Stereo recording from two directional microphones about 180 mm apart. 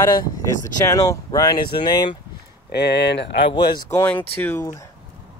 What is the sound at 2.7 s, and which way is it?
Speech, 70° left (ahead or behind).